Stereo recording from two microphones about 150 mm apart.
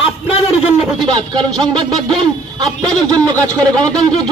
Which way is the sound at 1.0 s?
30° right (ahead or behind).